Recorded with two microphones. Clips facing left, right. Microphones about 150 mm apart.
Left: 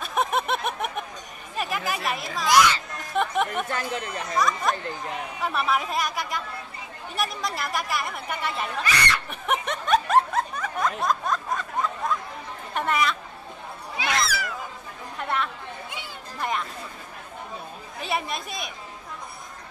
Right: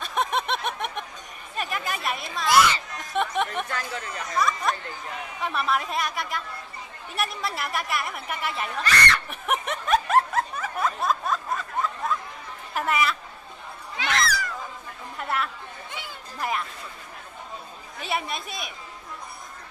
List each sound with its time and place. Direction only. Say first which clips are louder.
0.0 s a sound: left 1 dB; 5° left (ahead or behind)
1.6 s chatter: left 2 dB; centre (ahead or behind)
2.0 s a woman's voice: even; centre (ahead or behind)
3.2 s a sound: left 1 dB; centre (ahead or behind)
4.1 s speech: left 2 dB; 30° left (ahead or behind)
4.4 s a woman's voice: left 1 dB; centre (ahead or behind)
8.8 s speech: right 3 dB; 10° left (ahead or behind)
9.3 s snicker: left 1 dB; centre (ahead or behind)
12.7 s a woman's voice: even; 5° right (ahead or behind)
13.9 s cat: even; 10° left (ahead or behind)
15.1 s speech: left 1 dB; 5° right (ahead or behind)
18.0 s a woman's voice: left 1 dB; centre (ahead or behind)